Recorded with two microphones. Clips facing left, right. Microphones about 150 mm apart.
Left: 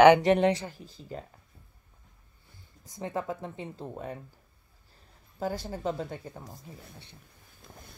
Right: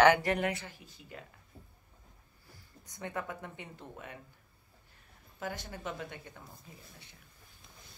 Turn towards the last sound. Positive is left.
turn(degrees=35)  # may be behind; listen again after turning